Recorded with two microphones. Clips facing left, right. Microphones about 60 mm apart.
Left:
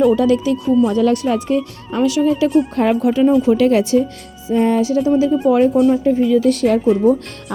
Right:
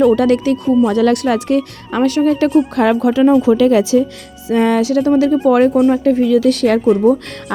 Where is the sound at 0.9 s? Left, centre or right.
Right.